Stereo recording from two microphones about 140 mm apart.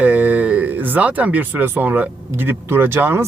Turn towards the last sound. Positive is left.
turn(degrees=-15)  # may be behind; listen again after turning